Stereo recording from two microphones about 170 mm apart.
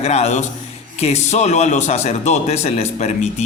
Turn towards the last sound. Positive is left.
turn(degrees=40)  # may be behind; listen again after turning